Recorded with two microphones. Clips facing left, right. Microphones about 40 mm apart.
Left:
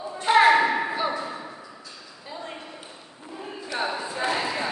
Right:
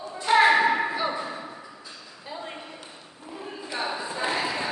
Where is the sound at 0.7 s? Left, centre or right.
Centre.